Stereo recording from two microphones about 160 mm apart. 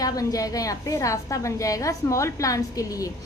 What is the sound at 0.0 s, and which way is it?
A woman's voice, 20° left (ahead or behind).